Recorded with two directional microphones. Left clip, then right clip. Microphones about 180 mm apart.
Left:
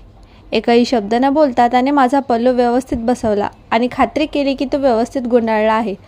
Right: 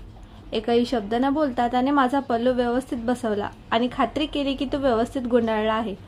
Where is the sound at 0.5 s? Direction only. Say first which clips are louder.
Left 9 dB; 35° left (ahead or behind).